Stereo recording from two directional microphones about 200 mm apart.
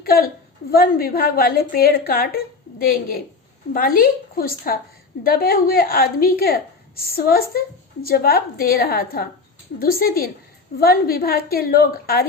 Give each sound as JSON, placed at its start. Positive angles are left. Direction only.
{"t": 0.0, "sound": "a woman's voice", "side_deg": 50}